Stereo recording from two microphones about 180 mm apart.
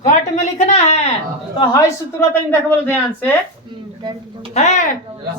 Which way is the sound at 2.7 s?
10° left (ahead or behind).